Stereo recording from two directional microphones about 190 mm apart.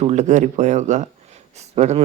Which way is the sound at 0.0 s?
35° right (ahead or behind).